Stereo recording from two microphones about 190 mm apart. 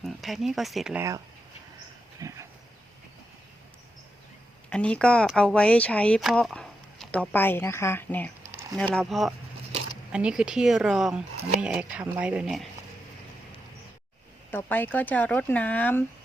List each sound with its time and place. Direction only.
0.0 s speech: centre (ahead or behind)
2.2 s a sound: 20° right (ahead or behind)
4.7 s speech: 5° left (ahead or behind)
14.5 s speech: 10° left (ahead or behind)